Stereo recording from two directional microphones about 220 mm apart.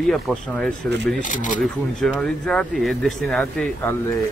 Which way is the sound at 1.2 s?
35° left (ahead or behind).